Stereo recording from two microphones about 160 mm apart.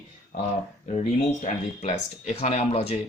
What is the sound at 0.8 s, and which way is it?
Speech, 45° left (ahead or behind).